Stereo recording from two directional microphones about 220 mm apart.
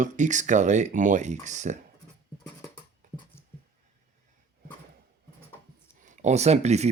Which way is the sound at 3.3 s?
10° left (ahead or behind).